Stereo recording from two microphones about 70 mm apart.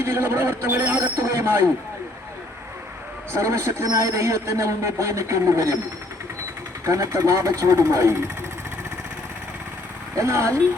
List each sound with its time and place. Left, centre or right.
0.0 s a man's voice: right
0.9 s train: right
1.4 s a sound: right
3.3 s speech: right
6.8 s speech: right
10.2 s speech: right